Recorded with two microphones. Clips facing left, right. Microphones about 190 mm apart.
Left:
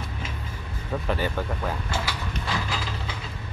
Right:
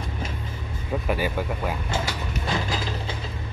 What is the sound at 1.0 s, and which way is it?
Speech, 10° right (ahead or behind).